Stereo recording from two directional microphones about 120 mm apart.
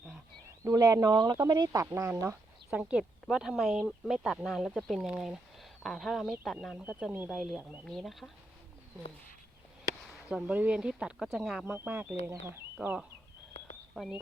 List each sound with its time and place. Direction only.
0.6 s speech: 30° right (ahead or behind)
2.6 s speech: 5° right (ahead or behind)
6.8 s speech: 10° right (ahead or behind)
10.2 s speech: 10° right (ahead or behind)
14.0 s speech: 5° left (ahead or behind)